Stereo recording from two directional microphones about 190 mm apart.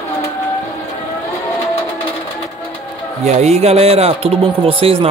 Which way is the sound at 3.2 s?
35° right (ahead or behind).